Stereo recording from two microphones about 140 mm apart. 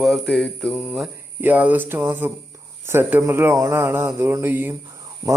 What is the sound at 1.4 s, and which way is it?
Speech, 10° right (ahead or behind).